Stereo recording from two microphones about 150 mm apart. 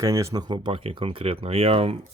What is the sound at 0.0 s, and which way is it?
Speech, 20° right (ahead or behind).